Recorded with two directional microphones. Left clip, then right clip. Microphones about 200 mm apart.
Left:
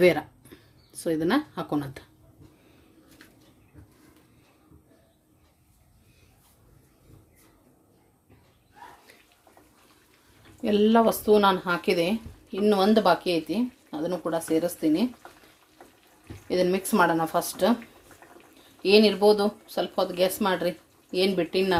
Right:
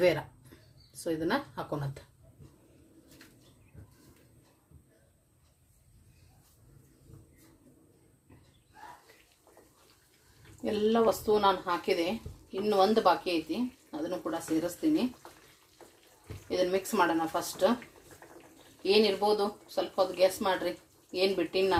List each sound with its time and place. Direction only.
0.0 s speech: 40° left (ahead or behind)
10.6 s speech: 55° left (ahead or behind)
15.8 s water tap: centre (ahead or behind)
16.5 s speech: 55° left (ahead or behind)
18.8 s speech: 55° left (ahead or behind)